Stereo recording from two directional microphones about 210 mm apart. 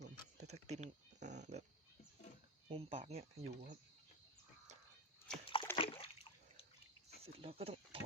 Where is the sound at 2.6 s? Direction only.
25° right (ahead or behind).